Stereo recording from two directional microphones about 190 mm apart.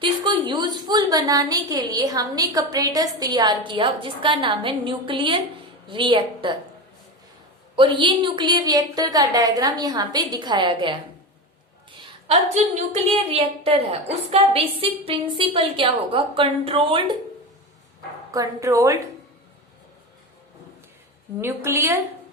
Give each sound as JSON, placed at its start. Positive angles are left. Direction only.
{"t": 0.0, "sound": "a woman's voice", "side_deg": -25}
{"t": 7.8, "sound": "a woman's voice", "side_deg": -25}
{"t": 11.9, "sound": "a woman's voice", "side_deg": -35}
{"t": 18.3, "sound": "a woman's voice", "side_deg": -15}
{"t": 21.4, "sound": "a woman's voice", "side_deg": -15}